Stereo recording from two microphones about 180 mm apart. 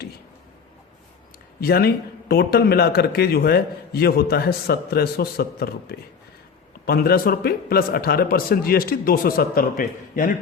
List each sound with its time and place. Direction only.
1.6 s a man's voice: 60° left (ahead or behind)